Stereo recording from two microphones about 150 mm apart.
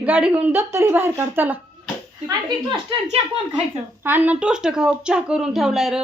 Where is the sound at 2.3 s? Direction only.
30° right (ahead or behind).